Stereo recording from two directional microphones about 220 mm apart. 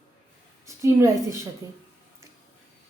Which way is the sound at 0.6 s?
15° right (ahead or behind).